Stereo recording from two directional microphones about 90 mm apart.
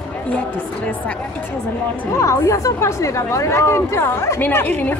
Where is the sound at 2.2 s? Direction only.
35° left (ahead or behind).